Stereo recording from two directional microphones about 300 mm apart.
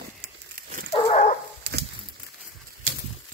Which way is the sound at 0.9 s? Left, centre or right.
Left.